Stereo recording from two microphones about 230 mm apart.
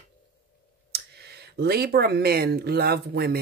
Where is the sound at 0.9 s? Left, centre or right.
Right.